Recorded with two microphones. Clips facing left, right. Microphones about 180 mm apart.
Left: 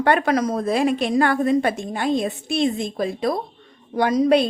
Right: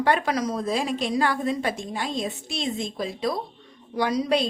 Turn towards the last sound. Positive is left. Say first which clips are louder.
# left 6 dB
turn(degrees=55)  # may be behind; listen again after turning